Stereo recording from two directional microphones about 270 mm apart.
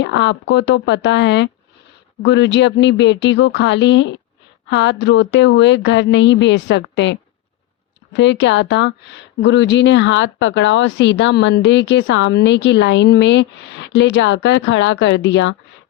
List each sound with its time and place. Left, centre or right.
0.0 s speech: left